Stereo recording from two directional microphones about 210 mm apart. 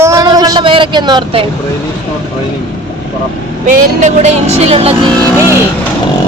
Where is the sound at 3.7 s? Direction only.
40° right (ahead or behind).